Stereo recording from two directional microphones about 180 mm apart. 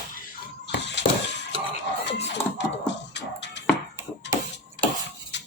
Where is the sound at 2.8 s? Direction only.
75° left (ahead or behind).